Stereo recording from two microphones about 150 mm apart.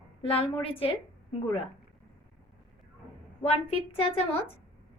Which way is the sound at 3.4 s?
40° left (ahead or behind).